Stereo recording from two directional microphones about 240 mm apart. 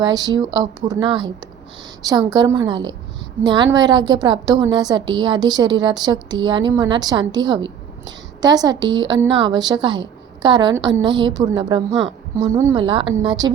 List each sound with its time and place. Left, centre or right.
0.0 s a woman's voice: centre